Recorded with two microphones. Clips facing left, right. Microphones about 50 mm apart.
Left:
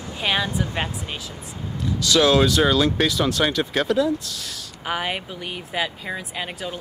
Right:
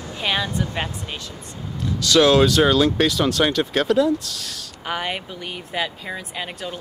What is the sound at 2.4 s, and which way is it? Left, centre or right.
Speech, centre.